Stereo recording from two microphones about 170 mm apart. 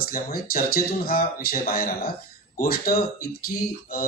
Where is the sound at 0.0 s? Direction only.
60° left (ahead or behind).